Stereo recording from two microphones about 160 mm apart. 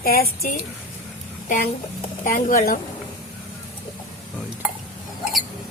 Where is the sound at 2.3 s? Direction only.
60° left (ahead or behind).